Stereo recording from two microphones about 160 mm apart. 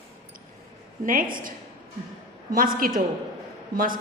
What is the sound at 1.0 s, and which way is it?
Speech, 60° right (ahead or behind).